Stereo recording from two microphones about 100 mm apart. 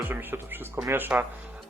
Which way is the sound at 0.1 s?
20° right (ahead or behind).